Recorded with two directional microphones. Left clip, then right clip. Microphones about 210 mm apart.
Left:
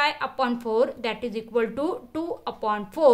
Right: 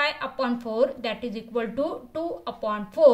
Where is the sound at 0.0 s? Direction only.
50° left (ahead or behind).